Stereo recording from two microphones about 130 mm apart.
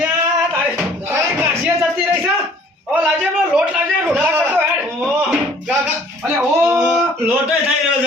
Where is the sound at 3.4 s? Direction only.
5° right (ahead or behind).